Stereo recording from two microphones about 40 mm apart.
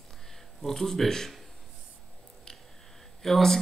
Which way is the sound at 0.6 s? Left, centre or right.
Centre.